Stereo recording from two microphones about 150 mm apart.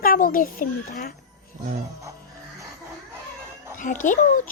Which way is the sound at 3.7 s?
60° left (ahead or behind).